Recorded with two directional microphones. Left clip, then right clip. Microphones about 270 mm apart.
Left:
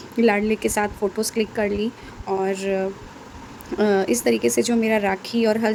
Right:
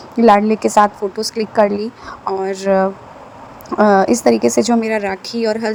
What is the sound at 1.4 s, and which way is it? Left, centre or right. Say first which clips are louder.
Speech: right 2 dB; right.